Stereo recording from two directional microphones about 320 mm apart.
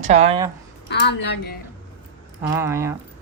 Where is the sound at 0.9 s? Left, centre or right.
Left.